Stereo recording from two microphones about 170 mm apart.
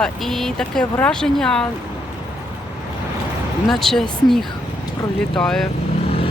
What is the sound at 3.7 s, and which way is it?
Speech, centre (ahead or behind).